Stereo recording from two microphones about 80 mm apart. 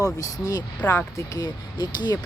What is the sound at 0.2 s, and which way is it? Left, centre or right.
Speech, left.